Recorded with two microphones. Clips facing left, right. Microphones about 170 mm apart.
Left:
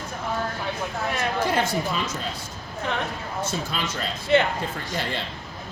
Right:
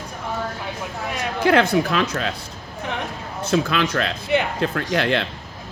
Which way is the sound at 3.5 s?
80° right.